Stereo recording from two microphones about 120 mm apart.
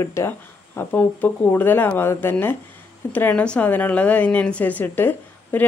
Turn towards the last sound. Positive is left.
turn(degrees=15)  # may be behind; listen again after turning